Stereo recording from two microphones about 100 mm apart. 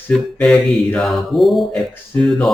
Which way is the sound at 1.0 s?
Centre (ahead or behind).